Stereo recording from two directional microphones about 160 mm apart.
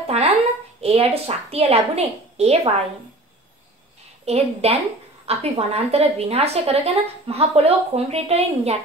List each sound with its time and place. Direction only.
0.0 s a sound: 40° right (ahead or behind)
0.7 s a woman's voice: 40° right (ahead or behind)
4.3 s a woman's voice: 40° right (ahead or behind)